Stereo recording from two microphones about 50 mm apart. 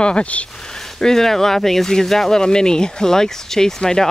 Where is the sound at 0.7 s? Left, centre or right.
Centre.